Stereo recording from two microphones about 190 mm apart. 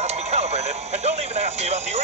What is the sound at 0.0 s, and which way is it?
Speech, 35° right (ahead or behind).